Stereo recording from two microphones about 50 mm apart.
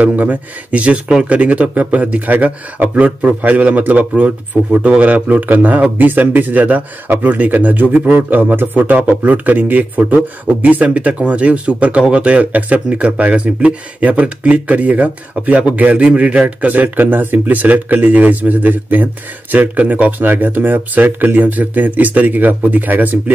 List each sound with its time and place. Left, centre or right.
0.0 s speech: right